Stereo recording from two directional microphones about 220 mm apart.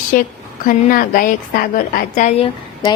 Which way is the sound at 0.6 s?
40° left (ahead or behind).